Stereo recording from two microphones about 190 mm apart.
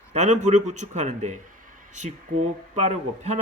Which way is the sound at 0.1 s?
40° right (ahead or behind).